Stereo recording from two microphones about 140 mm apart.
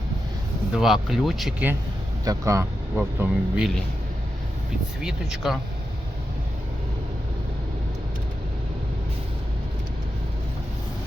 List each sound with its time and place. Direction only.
0.7 s speech: 5° right (ahead or behind)
2.2 s speech: 25° right (ahead or behind)
2.9 s speech: 5° right (ahead or behind)
5.0 s speech: centre (ahead or behind)